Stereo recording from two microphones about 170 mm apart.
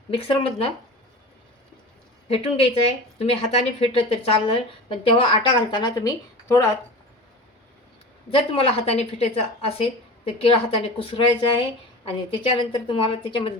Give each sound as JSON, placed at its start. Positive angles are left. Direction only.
{"t": 0.1, "sound": "a woman's voice", "side_deg": 35}
{"t": 2.3, "sound": "a woman's voice", "side_deg": 35}
{"t": 8.3, "sound": "a woman's voice", "side_deg": 35}